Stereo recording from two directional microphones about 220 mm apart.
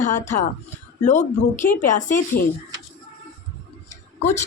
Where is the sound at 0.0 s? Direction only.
35° left (ahead or behind).